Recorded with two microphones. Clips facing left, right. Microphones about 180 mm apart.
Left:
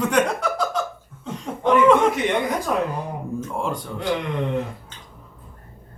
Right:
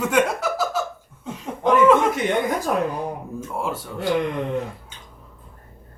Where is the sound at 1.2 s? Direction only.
5° right (ahead or behind).